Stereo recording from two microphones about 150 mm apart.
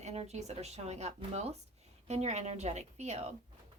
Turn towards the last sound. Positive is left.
turn(degrees=-45)  # may be behind; listen again after turning